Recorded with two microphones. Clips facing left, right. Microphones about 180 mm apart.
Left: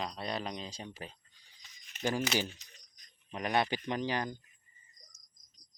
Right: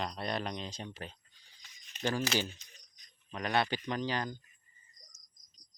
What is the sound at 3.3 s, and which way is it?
Speech, 15° left (ahead or behind).